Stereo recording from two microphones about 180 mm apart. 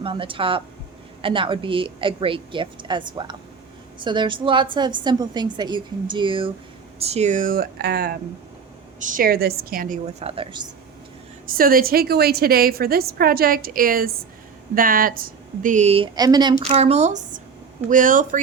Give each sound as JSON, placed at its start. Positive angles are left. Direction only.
{"t": 0.0, "sound": "a woman's voice", "side_deg": -30}
{"t": 9.0, "sound": "a woman's voice", "side_deg": -50}
{"t": 11.4, "sound": "a woman's voice", "side_deg": -55}
{"t": 16.1, "sound": "a woman's voice", "side_deg": -20}
{"t": 16.6, "sound": "a woman's voice", "side_deg": -35}